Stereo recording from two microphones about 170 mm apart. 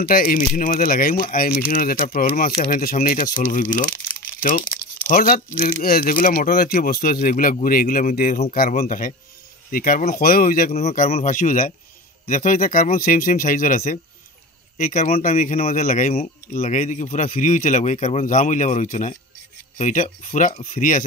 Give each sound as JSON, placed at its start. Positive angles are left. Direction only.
{"t": 0.0, "sound": "speech", "side_deg": 60}
{"t": 5.0, "sound": "speech", "side_deg": 55}
{"t": 10.7, "sound": "a man's voice", "side_deg": 40}
{"t": 11.2, "sound": "speech", "side_deg": 50}